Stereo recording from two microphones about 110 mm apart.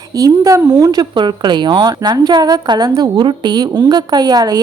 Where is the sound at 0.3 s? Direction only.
25° right (ahead or behind).